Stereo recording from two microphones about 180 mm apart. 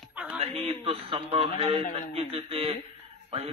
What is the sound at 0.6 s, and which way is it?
A man's voice, 30° right (ahead or behind).